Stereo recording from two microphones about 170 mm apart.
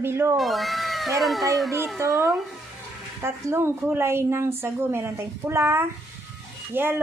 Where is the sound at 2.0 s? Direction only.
15° right (ahead or behind).